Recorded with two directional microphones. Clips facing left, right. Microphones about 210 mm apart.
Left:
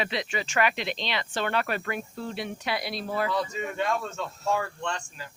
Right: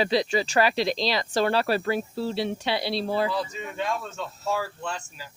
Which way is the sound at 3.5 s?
Centre (ahead or behind).